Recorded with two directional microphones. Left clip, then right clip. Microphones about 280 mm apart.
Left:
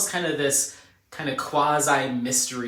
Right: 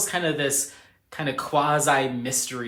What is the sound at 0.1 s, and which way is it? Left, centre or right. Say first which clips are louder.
Speech: right 1 dB; right.